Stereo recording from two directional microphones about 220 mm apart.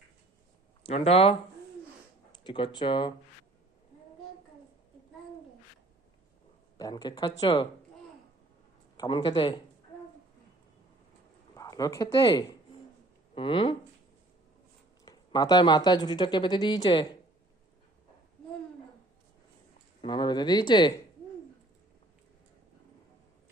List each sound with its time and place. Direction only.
0.9 s speech: 25° left (ahead or behind)
6.7 s speech: 15° left (ahead or behind)
9.0 s speech: 20° left (ahead or behind)
11.5 s a woman's voice: 15° left (ahead or behind)
15.0 s speech: 20° left (ahead or behind)
20.0 s speech: 20° left (ahead or behind)